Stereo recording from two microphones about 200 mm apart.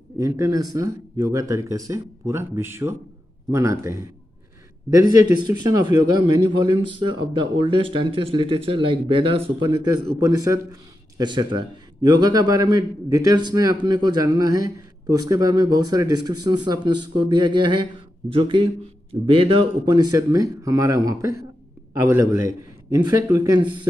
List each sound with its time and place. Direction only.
0.2 s speech: 15° right (ahead or behind)
5.7 s a man's voice: 20° right (ahead or behind)